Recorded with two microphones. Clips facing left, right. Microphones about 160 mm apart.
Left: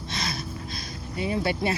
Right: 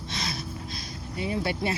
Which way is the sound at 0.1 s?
50° left (ahead or behind).